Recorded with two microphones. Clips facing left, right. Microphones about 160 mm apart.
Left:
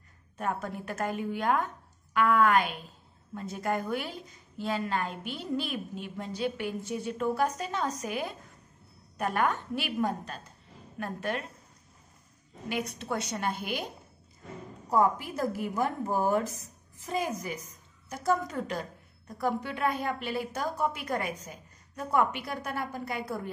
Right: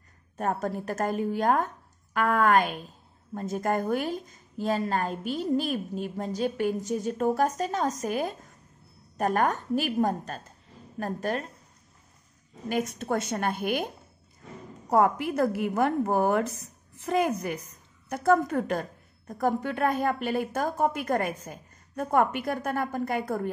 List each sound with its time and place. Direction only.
0.4 s a woman's voice: 40° right (ahead or behind)
12.6 s a woman's voice: 45° right (ahead or behind)
14.9 s a woman's voice: 70° right (ahead or behind); by 23.5 s 50° right (ahead or behind)